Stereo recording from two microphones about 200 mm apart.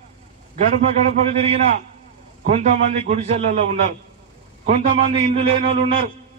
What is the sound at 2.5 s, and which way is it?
Speech, 35° right (ahead or behind).